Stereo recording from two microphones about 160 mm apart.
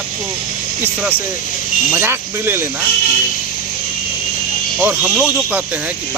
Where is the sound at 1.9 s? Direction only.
15° right (ahead or behind).